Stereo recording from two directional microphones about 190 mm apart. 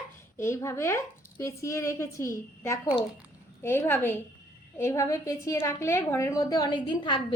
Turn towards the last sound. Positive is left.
turn(degrees=25)  # may be behind; listen again after turning